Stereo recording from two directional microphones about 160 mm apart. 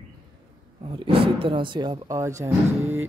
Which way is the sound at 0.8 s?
35° right (ahead or behind).